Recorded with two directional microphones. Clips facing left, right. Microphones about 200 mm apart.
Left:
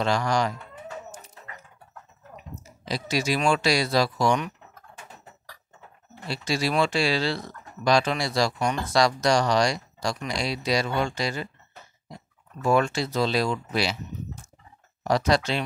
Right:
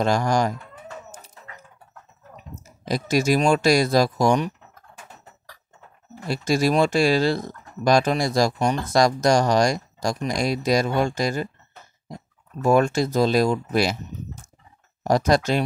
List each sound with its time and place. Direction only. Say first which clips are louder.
0.0 s speech: right 3 dB; 45° right (ahead or behind)
2.3 s speech: even; 45° right (ahead or behind)
6.2 s speech: right 6 dB; 45° right (ahead or behind)
12.6 s speech: right 4 dB; 45° right (ahead or behind)